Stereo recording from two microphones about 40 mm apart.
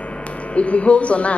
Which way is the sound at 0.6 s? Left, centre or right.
Left.